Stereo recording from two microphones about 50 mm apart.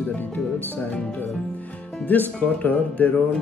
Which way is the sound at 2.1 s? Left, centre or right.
Left.